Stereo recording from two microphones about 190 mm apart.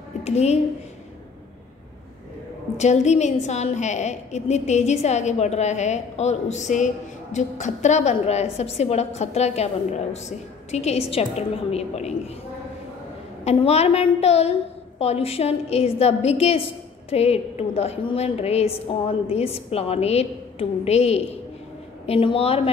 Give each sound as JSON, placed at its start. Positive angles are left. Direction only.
{"t": 0.2, "sound": "a woman's voice", "side_deg": 35}
{"t": 2.8, "sound": "a woman's voice", "side_deg": 35}
{"t": 13.4, "sound": "a woman's voice", "side_deg": 35}